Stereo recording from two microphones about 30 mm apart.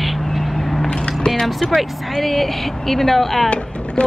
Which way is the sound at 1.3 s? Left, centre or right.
Centre.